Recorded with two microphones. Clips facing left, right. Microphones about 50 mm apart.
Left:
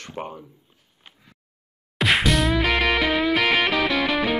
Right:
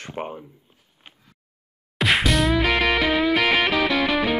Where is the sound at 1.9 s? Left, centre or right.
Centre.